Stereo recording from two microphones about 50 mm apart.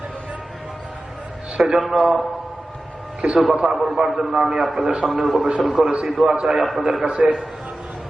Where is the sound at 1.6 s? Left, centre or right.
Centre.